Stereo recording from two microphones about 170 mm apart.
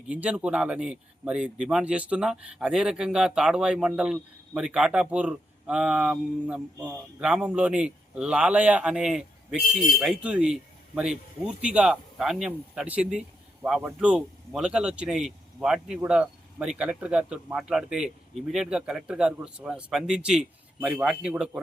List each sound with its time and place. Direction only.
0.1 s speech: 5° right (ahead or behind)
6.7 s a man's voice: 20° right (ahead or behind)
7.2 s speech: 5° right (ahead or behind)